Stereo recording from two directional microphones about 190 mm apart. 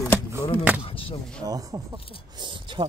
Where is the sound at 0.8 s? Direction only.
30° left (ahead or behind).